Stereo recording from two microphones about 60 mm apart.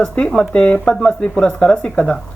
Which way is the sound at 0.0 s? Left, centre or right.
Centre.